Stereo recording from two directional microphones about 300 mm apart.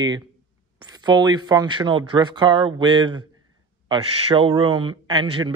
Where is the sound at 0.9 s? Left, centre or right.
Centre.